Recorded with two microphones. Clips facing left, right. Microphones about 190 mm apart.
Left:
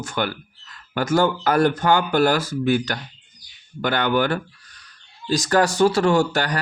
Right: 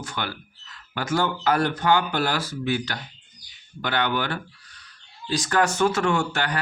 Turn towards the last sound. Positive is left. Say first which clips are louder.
# left 5 dB
turn(degrees=40)  # may be behind; listen again after turning